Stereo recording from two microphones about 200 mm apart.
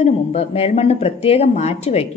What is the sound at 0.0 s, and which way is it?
A woman's voice, 30° left (ahead or behind).